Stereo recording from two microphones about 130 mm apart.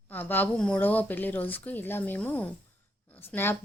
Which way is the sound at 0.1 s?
15° left (ahead or behind).